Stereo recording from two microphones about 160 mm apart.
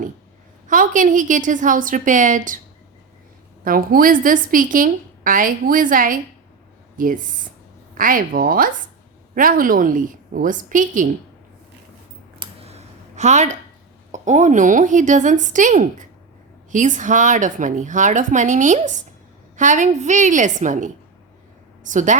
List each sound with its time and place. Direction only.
0.7 s a woman's voice: 55° right (ahead or behind)
3.6 s a woman's voice: 65° right (ahead or behind)
12.4 s a sound: 40° right (ahead or behind)
14.1 s a woman's voice: 50° right (ahead or behind)